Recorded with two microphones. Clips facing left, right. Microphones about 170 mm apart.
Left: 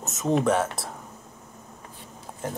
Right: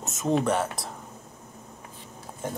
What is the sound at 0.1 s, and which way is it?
Speech, centre (ahead or behind).